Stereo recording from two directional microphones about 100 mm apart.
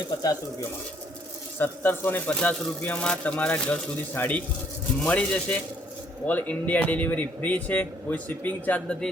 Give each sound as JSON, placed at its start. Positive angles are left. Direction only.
{"t": 1.5, "sound": "speech", "side_deg": 20}